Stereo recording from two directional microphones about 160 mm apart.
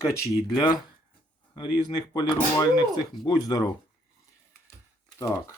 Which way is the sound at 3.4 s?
25° left (ahead or behind).